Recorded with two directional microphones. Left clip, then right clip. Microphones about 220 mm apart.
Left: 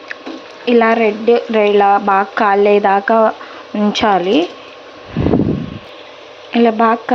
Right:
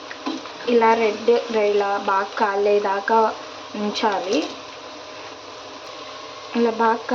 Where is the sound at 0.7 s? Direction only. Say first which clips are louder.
Left 5 dB; 35° left (ahead or behind).